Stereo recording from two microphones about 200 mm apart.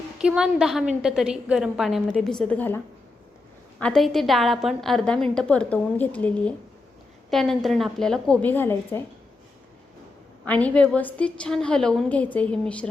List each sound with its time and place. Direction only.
0.2 s a woman's voice: 5° right (ahead or behind); by 9.0 s 10° left (ahead or behind)
10.4 s a woman's voice: 5° left (ahead or behind)